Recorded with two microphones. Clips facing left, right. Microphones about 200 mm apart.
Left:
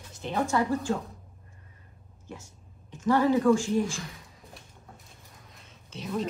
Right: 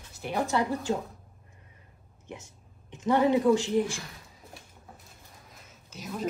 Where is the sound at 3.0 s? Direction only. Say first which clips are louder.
Left 1 dB; 20° right (ahead or behind).